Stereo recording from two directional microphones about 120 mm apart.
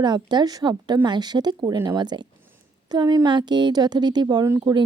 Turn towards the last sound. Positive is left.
turn(degrees=-35)  # may be behind; listen again after turning